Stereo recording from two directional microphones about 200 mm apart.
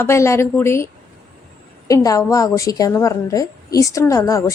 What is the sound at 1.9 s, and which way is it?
A woman's voice, 15° left (ahead or behind).